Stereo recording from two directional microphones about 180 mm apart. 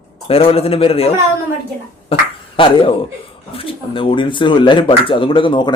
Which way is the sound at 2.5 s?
30° left (ahead or behind).